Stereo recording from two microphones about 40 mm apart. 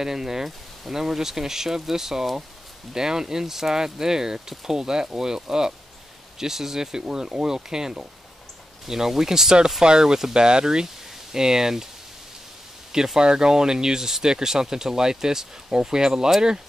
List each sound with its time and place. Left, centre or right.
0.0 s speech: centre
12.9 s speech: centre